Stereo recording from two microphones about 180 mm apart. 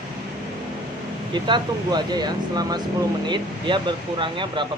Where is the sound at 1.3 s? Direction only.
25° right (ahead or behind).